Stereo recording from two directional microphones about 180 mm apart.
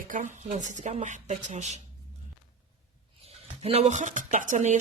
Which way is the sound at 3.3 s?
35° right (ahead or behind).